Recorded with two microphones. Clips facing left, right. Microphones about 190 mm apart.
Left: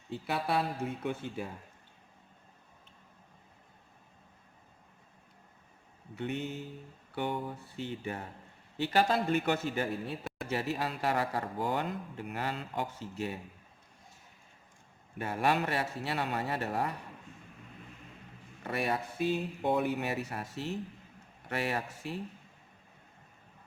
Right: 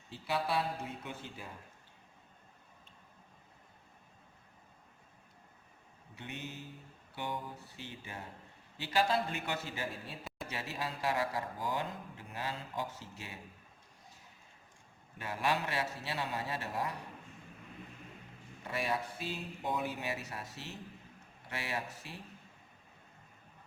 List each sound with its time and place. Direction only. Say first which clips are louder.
0.1 s a man's voice: left 2 dB; 55° left (ahead or behind)
6.1 s a man's voice: left 9 dB; 55° left (ahead or behind)
15.2 s a man's voice: left 5 dB; 55° left (ahead or behind)
18.6 s a man's voice: left 3 dB; 60° left (ahead or behind)